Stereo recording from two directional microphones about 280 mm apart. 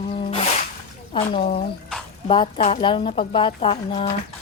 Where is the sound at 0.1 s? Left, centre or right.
Centre.